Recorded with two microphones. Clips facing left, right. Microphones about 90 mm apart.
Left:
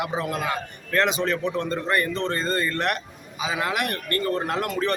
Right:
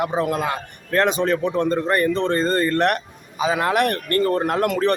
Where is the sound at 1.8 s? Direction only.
35° right (ahead or behind).